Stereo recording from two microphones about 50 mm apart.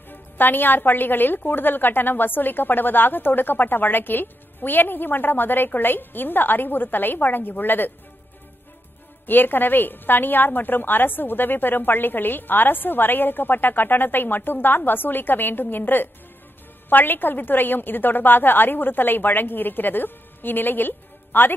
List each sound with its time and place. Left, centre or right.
0.1 s a woman's voice: left
9.2 s a woman's voice: left